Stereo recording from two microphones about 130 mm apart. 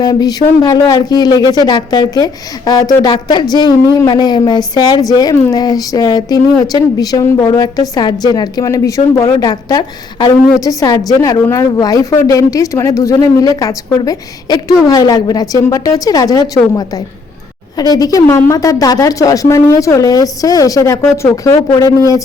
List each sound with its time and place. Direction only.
0.0 s a woman's voice: 30° left (ahead or behind)
17.7 s a woman's voice: 30° left (ahead or behind)